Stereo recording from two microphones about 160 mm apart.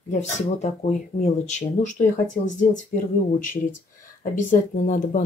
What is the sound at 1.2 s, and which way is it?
Speech, 45° left (ahead or behind).